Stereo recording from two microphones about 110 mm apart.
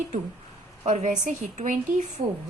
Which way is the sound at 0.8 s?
90° right.